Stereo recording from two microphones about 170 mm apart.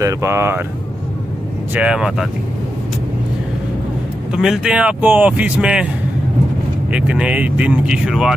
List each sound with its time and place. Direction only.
0.0 s speech: 15° right (ahead or behind)
1.7 s speech: 5° right (ahead or behind)
4.3 s speech: 5° right (ahead or behind)
6.9 s speech: 5° right (ahead or behind)